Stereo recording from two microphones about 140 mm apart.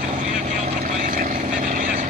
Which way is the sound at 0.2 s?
55° right (ahead or behind).